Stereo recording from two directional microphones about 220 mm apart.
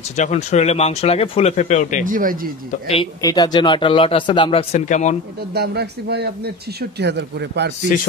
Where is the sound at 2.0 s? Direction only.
40° right (ahead or behind).